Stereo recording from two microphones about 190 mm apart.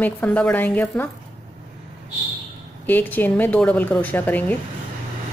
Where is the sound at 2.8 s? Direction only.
10° left (ahead or behind).